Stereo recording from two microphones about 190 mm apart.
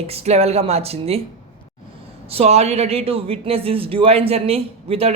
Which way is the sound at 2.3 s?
35° right (ahead or behind).